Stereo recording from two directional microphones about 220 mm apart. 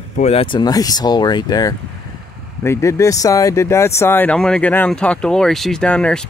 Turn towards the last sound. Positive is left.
turn(degrees=5)  # may be behind; listen again after turning